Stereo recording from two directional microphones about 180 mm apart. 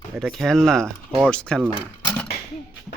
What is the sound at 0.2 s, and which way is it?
A child's voice, centre (ahead or behind).